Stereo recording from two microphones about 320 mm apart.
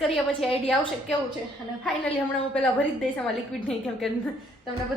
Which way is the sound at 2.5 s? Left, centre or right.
Centre.